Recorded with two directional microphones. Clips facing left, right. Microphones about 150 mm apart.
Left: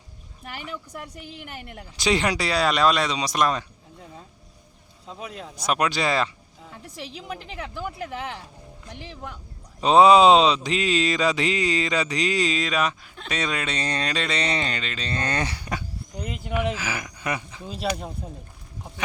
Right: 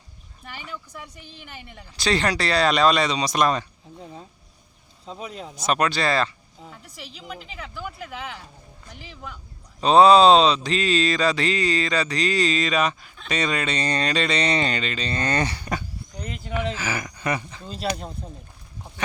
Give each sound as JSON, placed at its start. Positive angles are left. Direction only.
{"t": 2.0, "sound": "speech", "side_deg": 15}
{"t": 5.1, "sound": "speech", "side_deg": -20}
{"t": 5.6, "sound": "mantra", "side_deg": 10}
{"t": 9.8, "sound": "mantra", "side_deg": 15}